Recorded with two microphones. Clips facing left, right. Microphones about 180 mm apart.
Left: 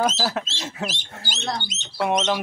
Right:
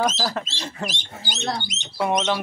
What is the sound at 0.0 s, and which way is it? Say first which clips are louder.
Speech: left 1 dB; 10° left (ahead or behind).